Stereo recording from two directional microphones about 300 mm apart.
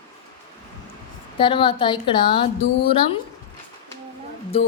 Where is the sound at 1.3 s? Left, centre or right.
Centre.